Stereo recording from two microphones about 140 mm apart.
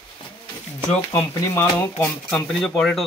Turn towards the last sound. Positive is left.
turn(degrees=0)  # may be behind; listen again after turning